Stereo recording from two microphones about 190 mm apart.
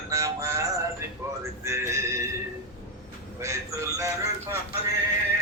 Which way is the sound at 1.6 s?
15° right (ahead or behind).